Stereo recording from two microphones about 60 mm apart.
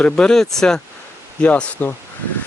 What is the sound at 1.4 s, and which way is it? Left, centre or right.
Speech, left.